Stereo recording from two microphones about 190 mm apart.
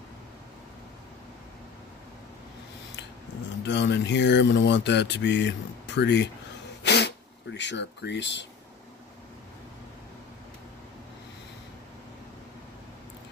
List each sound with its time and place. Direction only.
3.6 s speech: 70° left (ahead or behind)
6.8 s cough: 65° left (ahead or behind)
7.5 s speech: 65° left (ahead or behind)